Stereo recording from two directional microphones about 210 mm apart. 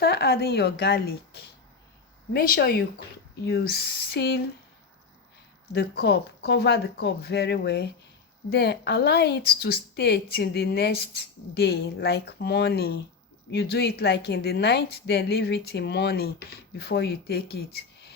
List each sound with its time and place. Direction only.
0.0 s a woman's voice: 50° left (ahead or behind)
5.7 s a woman's voice: 50° left (ahead or behind)